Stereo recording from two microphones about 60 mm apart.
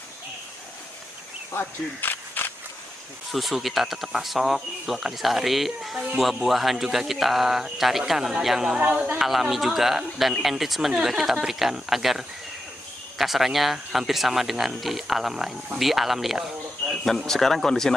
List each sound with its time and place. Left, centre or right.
1.5 s a sound: left
3.3 s speech: centre
8.7 s speech: right
9.2 s a man's voice: centre